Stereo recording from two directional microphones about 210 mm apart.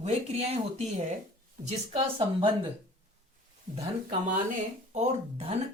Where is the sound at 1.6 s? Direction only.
25° right (ahead or behind).